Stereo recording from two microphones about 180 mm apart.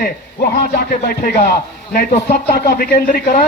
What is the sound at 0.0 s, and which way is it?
A man's voice, 60° left (ahead or behind).